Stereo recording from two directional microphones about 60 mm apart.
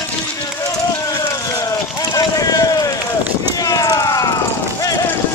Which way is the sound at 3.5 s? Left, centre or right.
Left.